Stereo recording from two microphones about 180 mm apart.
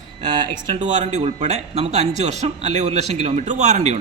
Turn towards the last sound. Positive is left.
turn(degrees=-40)  # may be behind; listen again after turning